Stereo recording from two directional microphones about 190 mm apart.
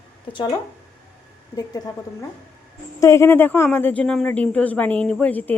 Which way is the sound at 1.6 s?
20° left (ahead or behind).